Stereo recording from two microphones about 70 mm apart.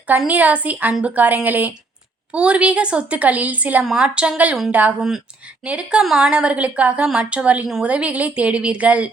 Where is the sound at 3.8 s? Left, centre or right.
Centre.